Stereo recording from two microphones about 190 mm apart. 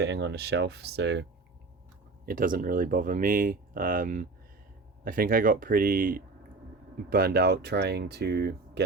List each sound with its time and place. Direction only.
0.0 s speech: 65° right (ahead or behind)
2.2 s speech: 45° right (ahead or behind)